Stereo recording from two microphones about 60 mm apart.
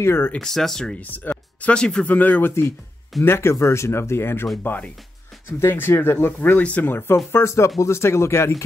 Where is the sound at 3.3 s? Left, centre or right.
Left.